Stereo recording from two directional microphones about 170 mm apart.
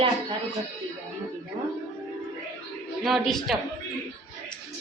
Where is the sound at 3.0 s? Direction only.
Centre (ahead or behind).